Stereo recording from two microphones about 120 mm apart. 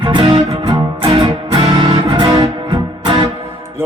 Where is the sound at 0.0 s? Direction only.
45° right (ahead or behind).